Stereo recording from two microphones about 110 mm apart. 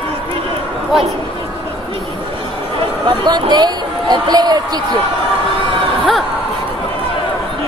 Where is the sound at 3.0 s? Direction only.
40° right (ahead or behind).